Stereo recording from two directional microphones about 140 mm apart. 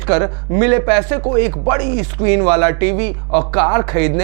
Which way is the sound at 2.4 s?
20° right (ahead or behind).